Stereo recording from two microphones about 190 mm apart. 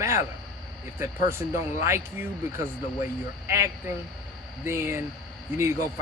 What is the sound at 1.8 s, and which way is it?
Speech, 15° right (ahead or behind).